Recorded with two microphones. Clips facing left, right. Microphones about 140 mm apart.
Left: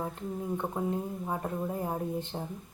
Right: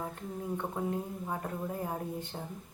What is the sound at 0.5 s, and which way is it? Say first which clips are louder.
Speech: left 2 dB; 20° left (ahead or behind).